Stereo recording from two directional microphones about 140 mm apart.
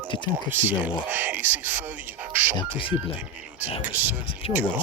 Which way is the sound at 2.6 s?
40° left (ahead or behind).